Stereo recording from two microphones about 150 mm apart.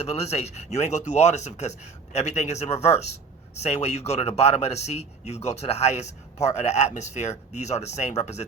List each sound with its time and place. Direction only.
0.0 s a man's voice: 45° left (ahead or behind)